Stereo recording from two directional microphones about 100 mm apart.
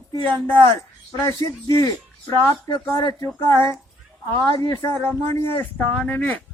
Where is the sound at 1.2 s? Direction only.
30° left (ahead or behind).